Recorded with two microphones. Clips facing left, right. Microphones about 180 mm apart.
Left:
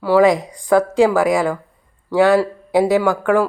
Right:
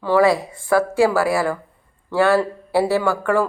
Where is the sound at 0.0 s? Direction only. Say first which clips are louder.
Left 3 dB; 15° left (ahead or behind).